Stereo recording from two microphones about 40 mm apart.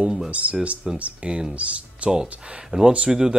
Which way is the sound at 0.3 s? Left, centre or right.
Right.